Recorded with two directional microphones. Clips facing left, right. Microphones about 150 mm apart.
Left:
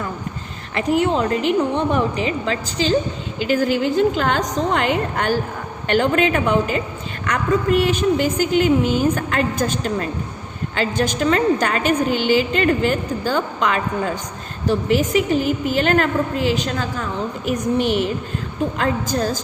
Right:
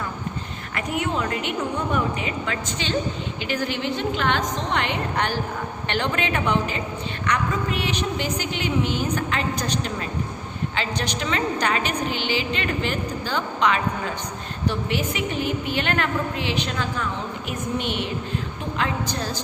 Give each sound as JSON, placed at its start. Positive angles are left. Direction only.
{"t": 0.8, "sound": "a woman's voice", "side_deg": 30}